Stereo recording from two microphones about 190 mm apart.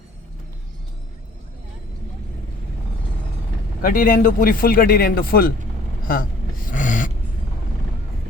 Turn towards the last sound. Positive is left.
turn(degrees=40)  # may be behind; listen again after turning